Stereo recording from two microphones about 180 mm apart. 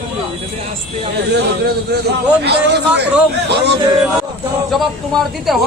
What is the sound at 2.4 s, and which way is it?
Speech, 70° right (ahead or behind).